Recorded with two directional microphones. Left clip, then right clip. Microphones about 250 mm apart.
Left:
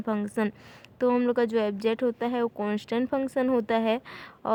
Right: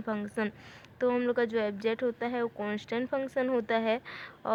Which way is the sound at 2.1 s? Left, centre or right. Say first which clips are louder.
Left 4 dB; left.